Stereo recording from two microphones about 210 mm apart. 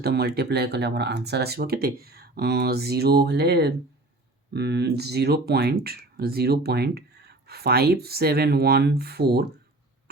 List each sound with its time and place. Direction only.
0.0 s speech: 50° right (ahead or behind)